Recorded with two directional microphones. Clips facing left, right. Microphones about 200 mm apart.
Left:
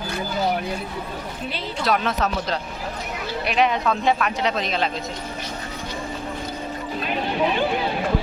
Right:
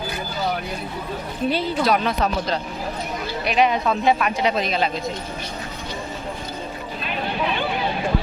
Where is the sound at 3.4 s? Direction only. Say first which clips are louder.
Right 1 dB; centre (ahead or behind).